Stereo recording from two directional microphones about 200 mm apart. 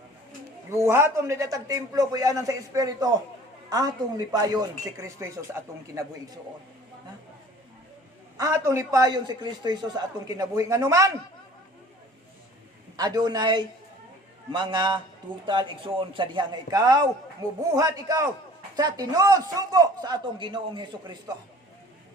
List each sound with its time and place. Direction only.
0.7 s a man's voice: 15° right (ahead or behind)
8.4 s a man's voice: 15° right (ahead or behind)
13.0 s a man's voice: 20° right (ahead or behind)